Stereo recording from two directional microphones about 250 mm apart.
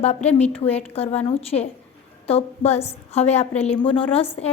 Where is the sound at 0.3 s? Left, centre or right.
Left.